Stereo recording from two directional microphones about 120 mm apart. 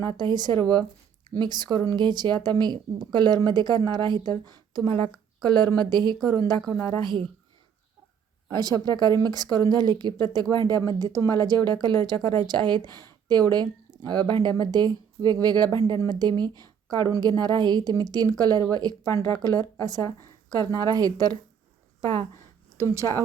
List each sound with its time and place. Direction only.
0.0 s speech: 40° right (ahead or behind)
8.4 s speech: 35° right (ahead or behind)
22.8 s speech: 25° right (ahead or behind)